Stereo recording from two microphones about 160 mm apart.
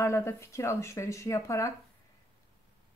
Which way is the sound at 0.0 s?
15° left (ahead or behind).